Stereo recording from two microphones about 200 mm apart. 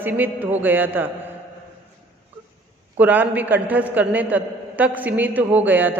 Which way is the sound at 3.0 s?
10° right (ahead or behind).